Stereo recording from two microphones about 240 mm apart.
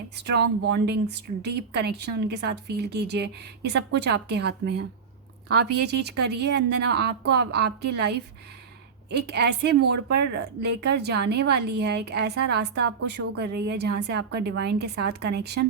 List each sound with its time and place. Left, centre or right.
0.2 s a woman's voice: right